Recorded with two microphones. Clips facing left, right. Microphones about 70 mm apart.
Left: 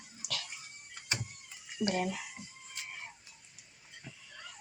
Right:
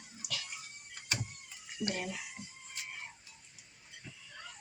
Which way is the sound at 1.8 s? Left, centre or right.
Left.